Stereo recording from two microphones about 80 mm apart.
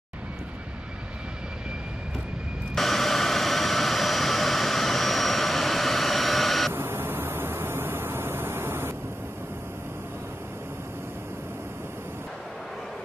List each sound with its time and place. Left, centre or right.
2.7 s jet engine: centre
6.7 s vehicle: right